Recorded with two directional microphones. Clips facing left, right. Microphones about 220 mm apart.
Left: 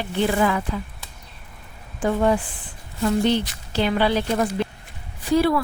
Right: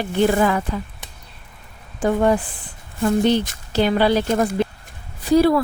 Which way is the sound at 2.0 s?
40° right (ahead or behind).